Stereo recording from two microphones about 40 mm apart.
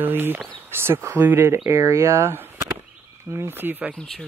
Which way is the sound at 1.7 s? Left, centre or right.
Right.